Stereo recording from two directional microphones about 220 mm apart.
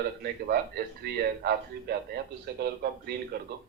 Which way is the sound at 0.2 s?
45° right (ahead or behind).